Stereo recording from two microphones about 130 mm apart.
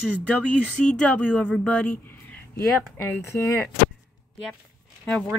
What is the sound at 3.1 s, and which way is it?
Speech, 20° left (ahead or behind).